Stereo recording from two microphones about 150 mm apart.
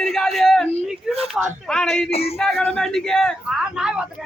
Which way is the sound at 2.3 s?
5° left (ahead or behind).